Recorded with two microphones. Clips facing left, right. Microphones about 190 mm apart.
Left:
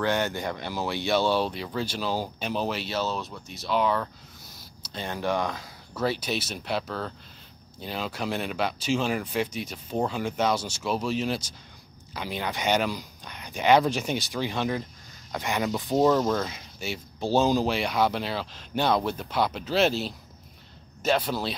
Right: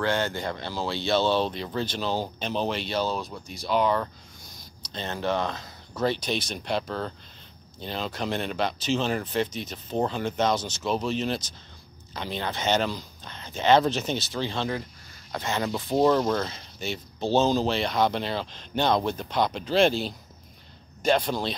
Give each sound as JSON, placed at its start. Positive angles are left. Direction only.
{"t": 0.0, "sound": "speech", "side_deg": 15}
{"t": 16.1, "sound": "speech", "side_deg": 5}